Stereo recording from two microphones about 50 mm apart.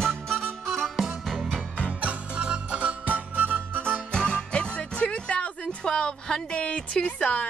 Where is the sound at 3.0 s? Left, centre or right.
Right.